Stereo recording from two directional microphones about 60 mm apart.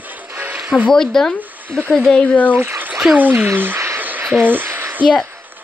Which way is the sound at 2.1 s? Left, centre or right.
Left.